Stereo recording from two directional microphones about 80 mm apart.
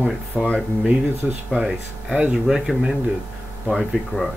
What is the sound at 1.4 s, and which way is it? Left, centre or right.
Speech, centre.